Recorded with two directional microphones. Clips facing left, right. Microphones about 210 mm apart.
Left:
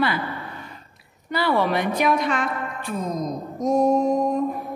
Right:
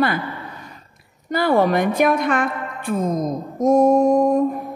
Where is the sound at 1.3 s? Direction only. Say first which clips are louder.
Right 5 dB; 45° right (ahead or behind).